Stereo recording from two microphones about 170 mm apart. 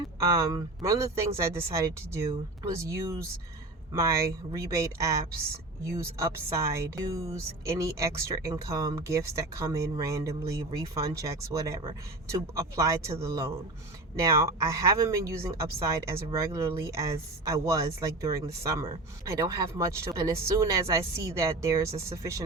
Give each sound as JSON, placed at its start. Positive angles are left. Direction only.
{"t": 0.5, "sound": "speech", "side_deg": -20}
{"t": 4.5, "sound": "speech", "side_deg": -20}